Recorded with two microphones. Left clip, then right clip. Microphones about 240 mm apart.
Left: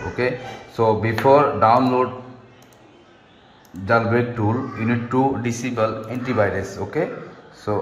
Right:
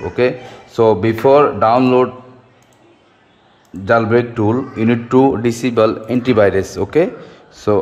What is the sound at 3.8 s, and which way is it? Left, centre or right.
A man's voice, right.